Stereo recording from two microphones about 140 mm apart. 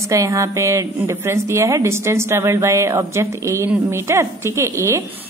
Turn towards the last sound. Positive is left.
turn(degrees=-15)  # may be behind; listen again after turning